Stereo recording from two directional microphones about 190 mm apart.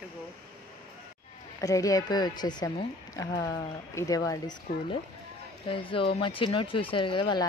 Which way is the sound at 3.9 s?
20° left (ahead or behind).